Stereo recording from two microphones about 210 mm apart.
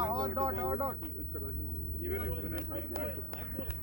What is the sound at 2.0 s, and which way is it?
Speech, 65° right (ahead or behind).